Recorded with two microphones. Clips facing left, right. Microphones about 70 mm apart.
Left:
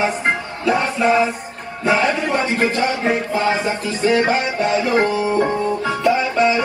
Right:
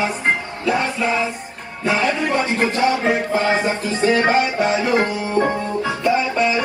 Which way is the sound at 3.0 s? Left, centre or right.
Right.